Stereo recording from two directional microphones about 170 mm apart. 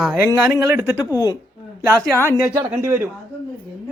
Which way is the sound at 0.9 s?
20° left (ahead or behind).